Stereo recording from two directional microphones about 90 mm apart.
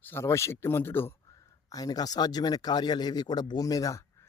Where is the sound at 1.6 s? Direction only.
45° left (ahead or behind).